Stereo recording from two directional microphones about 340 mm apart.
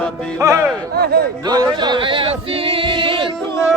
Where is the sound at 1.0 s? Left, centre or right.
Right.